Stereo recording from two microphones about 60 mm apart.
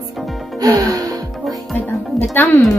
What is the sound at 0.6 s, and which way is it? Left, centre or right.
Music, right.